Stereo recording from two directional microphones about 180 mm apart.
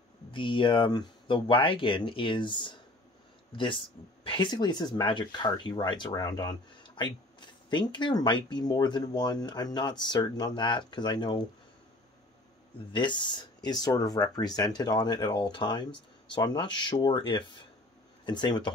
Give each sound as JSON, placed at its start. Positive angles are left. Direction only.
{"t": 0.3, "sound": "speech", "side_deg": 30}
{"t": 12.9, "sound": "speech", "side_deg": 25}